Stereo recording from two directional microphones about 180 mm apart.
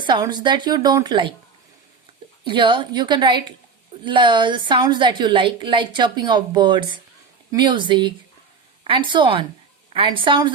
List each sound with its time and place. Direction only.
0.0 s a woman's voice: 25° right (ahead or behind)
2.4 s a woman's voice: 25° right (ahead or behind)